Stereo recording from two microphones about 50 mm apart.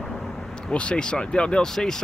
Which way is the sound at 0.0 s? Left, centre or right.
Centre.